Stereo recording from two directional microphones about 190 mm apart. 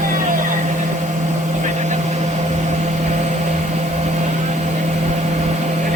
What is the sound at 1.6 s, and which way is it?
Vehicle, 35° right (ahead or behind).